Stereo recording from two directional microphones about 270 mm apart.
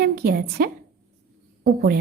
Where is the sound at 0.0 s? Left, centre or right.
Right.